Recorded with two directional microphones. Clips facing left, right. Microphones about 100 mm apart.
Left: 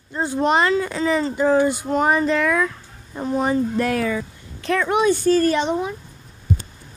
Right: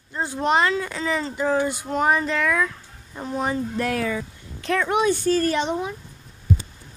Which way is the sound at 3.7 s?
60° left (ahead or behind).